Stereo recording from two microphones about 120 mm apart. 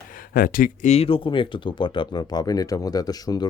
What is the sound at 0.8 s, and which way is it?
Speech, 65° left (ahead or behind).